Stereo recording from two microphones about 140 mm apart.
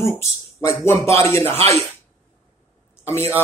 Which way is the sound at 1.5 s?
45° right (ahead or behind).